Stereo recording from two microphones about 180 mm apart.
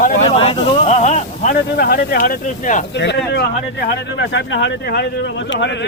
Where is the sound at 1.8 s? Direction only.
55° left (ahead or behind).